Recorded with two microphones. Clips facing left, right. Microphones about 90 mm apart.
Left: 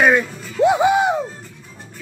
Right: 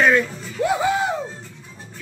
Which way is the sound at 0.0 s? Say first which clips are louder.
Left 2 dB; 20° left (ahead or behind).